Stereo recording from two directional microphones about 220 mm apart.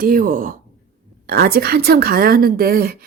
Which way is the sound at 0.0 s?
40° right (ahead or behind).